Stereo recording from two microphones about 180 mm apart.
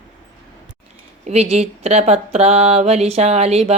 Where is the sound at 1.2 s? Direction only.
35° right (ahead or behind).